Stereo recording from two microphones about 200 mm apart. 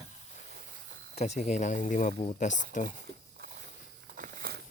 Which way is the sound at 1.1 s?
35° left (ahead or behind).